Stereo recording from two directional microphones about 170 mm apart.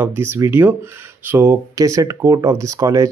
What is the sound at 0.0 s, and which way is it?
Speech, 15° right (ahead or behind).